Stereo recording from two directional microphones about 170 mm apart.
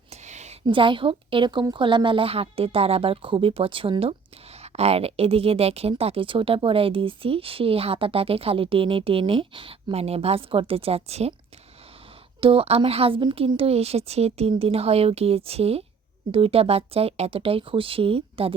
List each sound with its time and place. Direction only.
0.1 s a sound: 40° right (ahead or behind)
0.6 s speech: 30° right (ahead or behind)
12.4 s speech: 35° right (ahead or behind)